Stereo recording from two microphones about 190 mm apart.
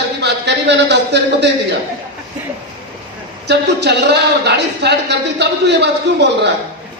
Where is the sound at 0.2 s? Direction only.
65° right (ahead or behind).